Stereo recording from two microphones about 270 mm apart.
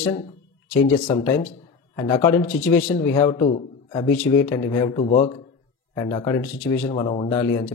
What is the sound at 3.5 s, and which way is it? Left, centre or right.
Speech, left.